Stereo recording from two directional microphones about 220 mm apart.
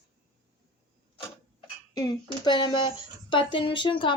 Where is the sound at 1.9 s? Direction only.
20° left (ahead or behind).